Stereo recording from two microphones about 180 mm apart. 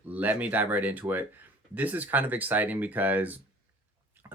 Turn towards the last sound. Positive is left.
turn(degrees=-15)  # may be behind; listen again after turning